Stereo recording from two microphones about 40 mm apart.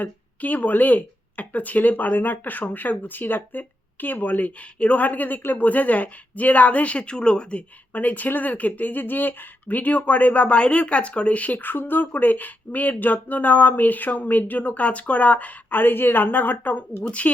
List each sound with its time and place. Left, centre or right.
0.0 s speech: left
7.9 s speech: left
17.0 s speech: left